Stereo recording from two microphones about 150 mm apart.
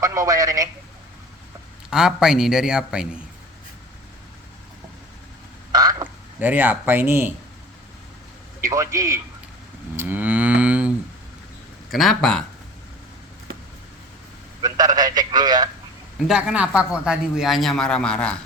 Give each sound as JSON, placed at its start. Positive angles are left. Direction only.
{"t": 0.0, "sound": "speech", "side_deg": -20}
{"t": 1.9, "sound": "speech", "side_deg": -5}
{"t": 5.7, "sound": "frog", "side_deg": -25}
{"t": 6.4, "sound": "speech", "side_deg": -10}
{"t": 8.6, "sound": "a man's voice", "side_deg": -20}
{"t": 9.9, "sound": "moo", "side_deg": -15}
{"t": 11.9, "sound": "speech", "side_deg": 0}
{"t": 14.6, "sound": "a sound", "side_deg": -25}
{"t": 16.2, "sound": "speech", "side_deg": -5}